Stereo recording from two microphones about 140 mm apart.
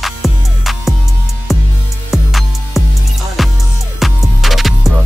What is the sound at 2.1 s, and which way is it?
Music, centre (ahead or behind).